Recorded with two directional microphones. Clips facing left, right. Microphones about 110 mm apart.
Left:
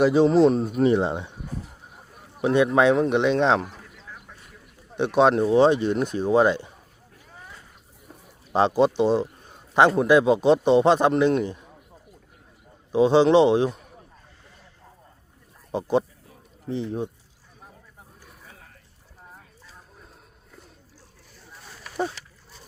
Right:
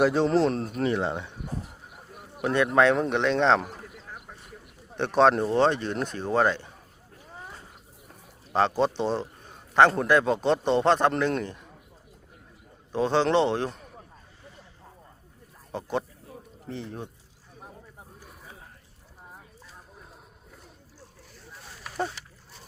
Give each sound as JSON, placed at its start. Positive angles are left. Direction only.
{"t": 0.0, "sound": "speech", "side_deg": 5}
{"t": 0.9, "sound": "speech", "side_deg": 20}
{"t": 2.4, "sound": "speech", "side_deg": 15}
{"t": 4.9, "sound": "speech", "side_deg": 5}
{"t": 8.5, "sound": "speech", "side_deg": 15}
{"t": 12.9, "sound": "speech", "side_deg": 15}
{"t": 15.7, "sound": "speech", "side_deg": 20}